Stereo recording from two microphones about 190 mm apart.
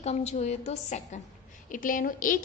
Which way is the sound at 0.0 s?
35° left (ahead or behind).